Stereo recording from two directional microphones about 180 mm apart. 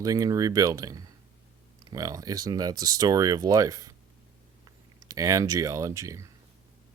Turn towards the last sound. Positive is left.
turn(degrees=-15)  # may be behind; listen again after turning